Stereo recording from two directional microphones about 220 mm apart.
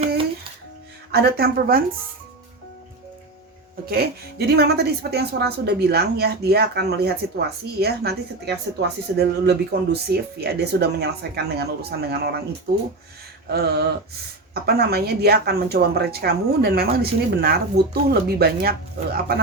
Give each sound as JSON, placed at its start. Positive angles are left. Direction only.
{"t": 1.1, "sound": "a woman's voice", "side_deg": -45}
{"t": 3.8, "sound": "a woman's voice", "side_deg": -45}